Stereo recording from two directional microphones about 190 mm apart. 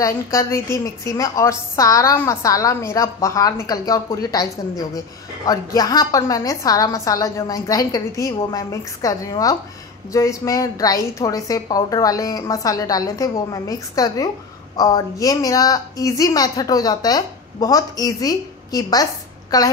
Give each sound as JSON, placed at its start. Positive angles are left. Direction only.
{"t": 0.0, "sound": "a woman's voice", "side_deg": 15}